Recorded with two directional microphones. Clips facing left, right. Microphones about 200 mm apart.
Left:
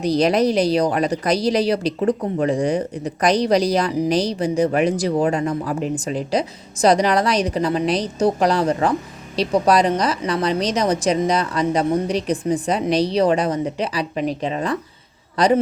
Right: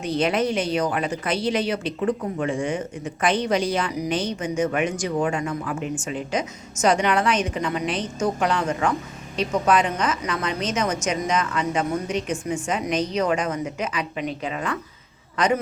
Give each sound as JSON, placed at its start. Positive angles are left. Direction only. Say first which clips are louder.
{"t": 0.0, "sound": "a woman's voice", "louder": "left 5 dB", "side_deg": 35}